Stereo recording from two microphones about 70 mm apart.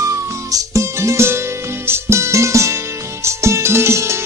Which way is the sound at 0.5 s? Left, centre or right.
Right.